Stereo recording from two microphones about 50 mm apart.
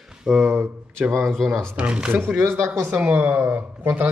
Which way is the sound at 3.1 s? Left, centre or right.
Right.